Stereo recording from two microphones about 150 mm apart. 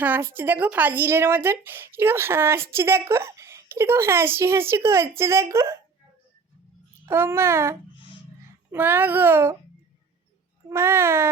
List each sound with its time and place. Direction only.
0.0 s a woman's voice: 10° right (ahead or behind)
7.0 s a woman's voice: 15° right (ahead or behind)
10.7 s a woman's voice: 15° right (ahead or behind)